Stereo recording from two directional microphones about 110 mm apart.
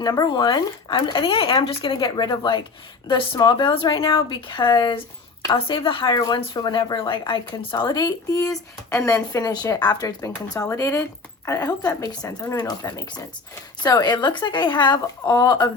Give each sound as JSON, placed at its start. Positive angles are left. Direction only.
{"t": 0.0, "sound": "a woman's voice", "side_deg": 35}
{"t": 6.1, "sound": "a woman's voice", "side_deg": 35}